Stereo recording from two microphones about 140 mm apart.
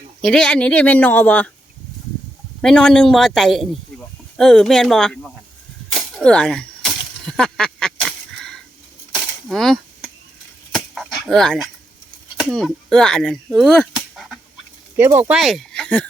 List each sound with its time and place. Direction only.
0.2 s speech: 5° left (ahead or behind)
2.6 s a man's voice: 5° left (ahead or behind)
5.9 s a sound: 5° left (ahead or behind)
10.8 s dog: centre (ahead or behind)
12.4 s speech: centre (ahead or behind)
14.9 s speech: 15° right (ahead or behind)
15.3 s speech: centre (ahead or behind)